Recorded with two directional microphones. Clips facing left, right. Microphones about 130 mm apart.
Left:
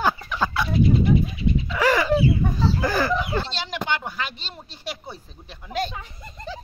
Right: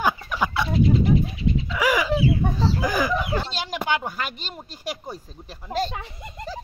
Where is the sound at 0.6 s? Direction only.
25° right (ahead or behind).